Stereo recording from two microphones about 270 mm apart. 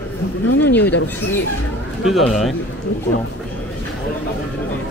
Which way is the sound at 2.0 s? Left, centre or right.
Centre.